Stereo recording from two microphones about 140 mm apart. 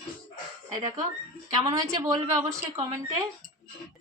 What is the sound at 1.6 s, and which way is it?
A woman's voice, 25° right (ahead or behind).